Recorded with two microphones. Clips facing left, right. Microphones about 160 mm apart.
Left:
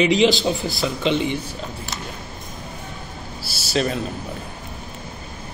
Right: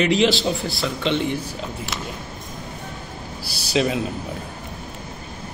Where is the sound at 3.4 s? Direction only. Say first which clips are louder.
Right 1 dB; 15° right (ahead or behind).